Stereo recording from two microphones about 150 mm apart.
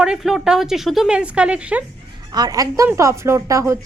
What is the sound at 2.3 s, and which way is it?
Speech, 25° right (ahead or behind).